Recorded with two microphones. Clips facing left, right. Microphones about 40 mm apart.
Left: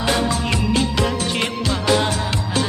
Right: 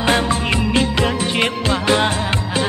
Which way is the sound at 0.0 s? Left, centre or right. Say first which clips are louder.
Right 3 dB; right.